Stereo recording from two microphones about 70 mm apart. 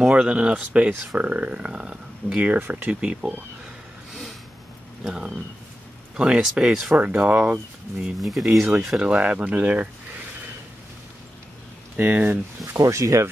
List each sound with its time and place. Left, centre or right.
0.0 s speech: centre
3.0 s speech: centre
5.0 s speech: centre
7.0 s speech: right
8.0 s speech: centre
8.8 s speech: centre
12.0 s speech: right
12.6 s speech: right